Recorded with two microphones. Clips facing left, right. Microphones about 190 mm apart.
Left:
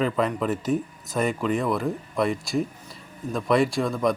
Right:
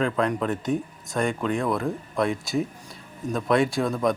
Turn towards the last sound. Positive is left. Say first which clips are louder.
# even
turn(degrees=0)  # may be behind; listen again after turning